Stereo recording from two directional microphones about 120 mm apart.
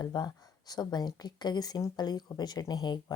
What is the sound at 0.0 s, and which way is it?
Speech, 35° left (ahead or behind).